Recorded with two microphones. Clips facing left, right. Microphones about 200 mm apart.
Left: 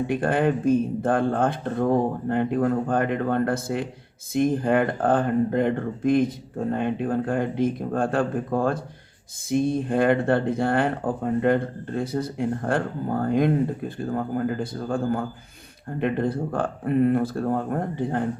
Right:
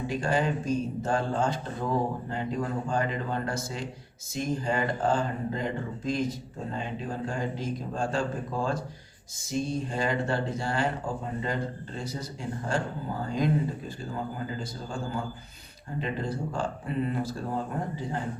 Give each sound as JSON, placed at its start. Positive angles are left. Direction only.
{"t": 0.1, "sound": "speech", "side_deg": 55}